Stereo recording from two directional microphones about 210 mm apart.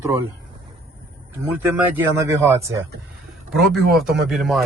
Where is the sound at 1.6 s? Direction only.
10° right (ahead or behind).